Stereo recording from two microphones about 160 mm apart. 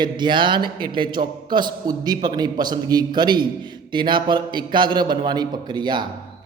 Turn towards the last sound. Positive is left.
turn(degrees=-30)  # may be behind; listen again after turning